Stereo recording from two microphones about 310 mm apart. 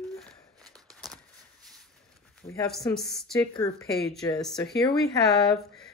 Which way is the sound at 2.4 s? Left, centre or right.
Centre.